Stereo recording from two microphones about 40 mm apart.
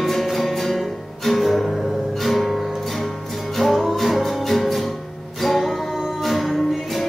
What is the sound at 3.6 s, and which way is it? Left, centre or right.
Music, centre.